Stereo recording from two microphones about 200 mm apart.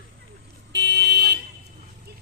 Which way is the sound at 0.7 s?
60° right (ahead or behind).